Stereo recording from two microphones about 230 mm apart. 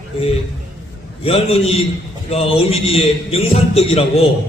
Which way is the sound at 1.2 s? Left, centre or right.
Left.